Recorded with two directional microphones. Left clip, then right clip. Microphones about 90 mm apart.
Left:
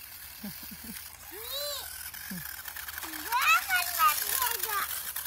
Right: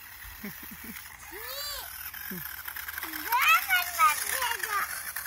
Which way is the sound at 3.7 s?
25° right (ahead or behind).